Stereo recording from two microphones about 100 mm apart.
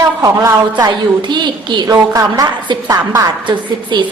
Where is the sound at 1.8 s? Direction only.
35° right (ahead or behind).